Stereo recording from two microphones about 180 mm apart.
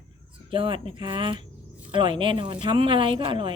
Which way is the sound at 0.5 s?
30° right (ahead or behind).